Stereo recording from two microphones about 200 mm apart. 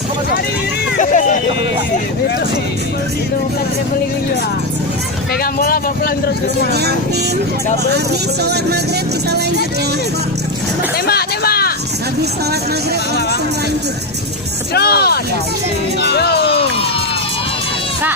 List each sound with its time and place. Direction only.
0.9 s vehicle: 40° left (ahead or behind)
5.4 s speech: 45° left (ahead or behind)
10.9 s hubbub: 50° left (ahead or behind)
14.7 s speech: 50° left (ahead or behind)
16.0 s music: 55° left (ahead or behind)